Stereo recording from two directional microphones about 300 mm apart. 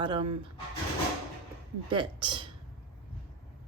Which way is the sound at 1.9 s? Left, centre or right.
Centre.